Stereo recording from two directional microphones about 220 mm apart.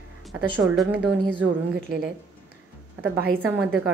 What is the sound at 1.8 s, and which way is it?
Speech, 45° right (ahead or behind).